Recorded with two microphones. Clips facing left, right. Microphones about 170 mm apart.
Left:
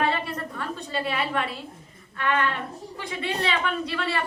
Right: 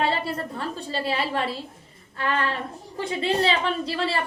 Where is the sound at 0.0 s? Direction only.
30° right (ahead or behind).